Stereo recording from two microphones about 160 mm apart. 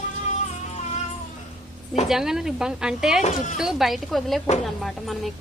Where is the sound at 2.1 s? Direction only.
5° right (ahead or behind).